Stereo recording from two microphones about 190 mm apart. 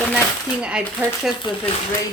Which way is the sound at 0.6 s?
5° right (ahead or behind).